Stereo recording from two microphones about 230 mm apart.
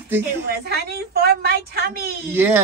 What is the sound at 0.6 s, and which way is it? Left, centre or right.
A woman's voice, right.